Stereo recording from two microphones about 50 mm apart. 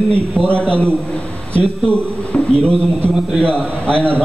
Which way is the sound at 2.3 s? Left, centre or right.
Left.